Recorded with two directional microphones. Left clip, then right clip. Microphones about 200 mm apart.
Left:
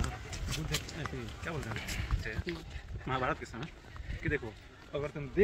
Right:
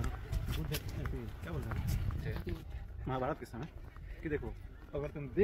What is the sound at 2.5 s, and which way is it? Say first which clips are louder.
Speech: left 7 dB; 10° left (ahead or behind).